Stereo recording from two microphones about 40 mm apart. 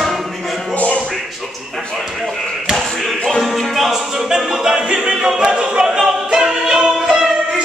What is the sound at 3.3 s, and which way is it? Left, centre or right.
Music, centre.